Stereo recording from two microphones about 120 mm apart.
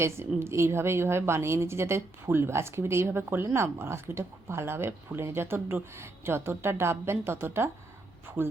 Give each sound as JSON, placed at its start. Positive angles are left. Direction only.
{"t": 0.0, "sound": "a woman's voice", "side_deg": -20}